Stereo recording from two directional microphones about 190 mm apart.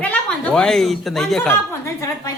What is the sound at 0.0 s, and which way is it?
A woman's voice, 5° left (ahead or behind).